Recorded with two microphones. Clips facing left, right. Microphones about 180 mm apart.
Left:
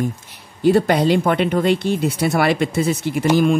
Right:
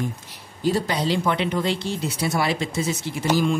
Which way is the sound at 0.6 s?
60° left (ahead or behind).